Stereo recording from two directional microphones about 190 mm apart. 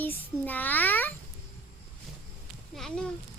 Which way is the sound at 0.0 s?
10° left (ahead or behind).